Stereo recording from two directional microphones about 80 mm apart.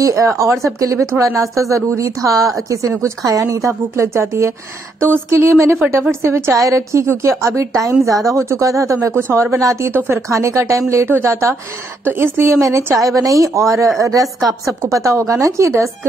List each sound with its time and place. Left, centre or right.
0.0 s a woman's voice: right
14.2 s speech: centre
14.8 s a woman's voice: right